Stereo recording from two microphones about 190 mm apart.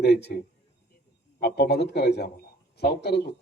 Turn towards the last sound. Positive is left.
turn(degrees=60)  # may be behind; listen again after turning